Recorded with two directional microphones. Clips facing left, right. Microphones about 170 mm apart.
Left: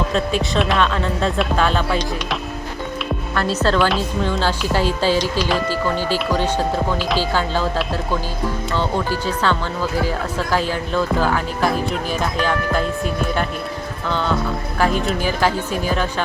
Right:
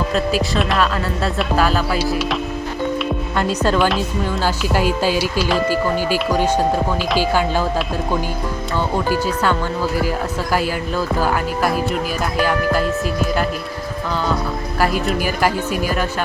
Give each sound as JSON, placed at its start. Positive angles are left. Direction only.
{"t": 0.1, "sound": "speech", "side_deg": -5}
{"t": 3.3, "sound": "speech", "side_deg": -15}
{"t": 3.8, "sound": "speech", "side_deg": -5}
{"t": 9.0, "sound": "speech", "side_deg": -10}
{"t": 14.8, "sound": "speech", "side_deg": -5}